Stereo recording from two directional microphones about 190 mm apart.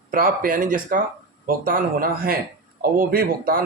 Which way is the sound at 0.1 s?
45° right (ahead or behind).